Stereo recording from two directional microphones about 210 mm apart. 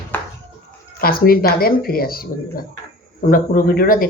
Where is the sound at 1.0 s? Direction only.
45° left (ahead or behind).